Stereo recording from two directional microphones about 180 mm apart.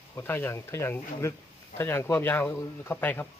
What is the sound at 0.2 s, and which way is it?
Speech, 10° left (ahead or behind).